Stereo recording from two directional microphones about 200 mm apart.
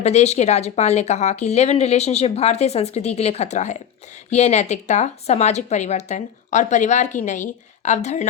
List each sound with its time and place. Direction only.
0.0 s speech: 35° left (ahead or behind)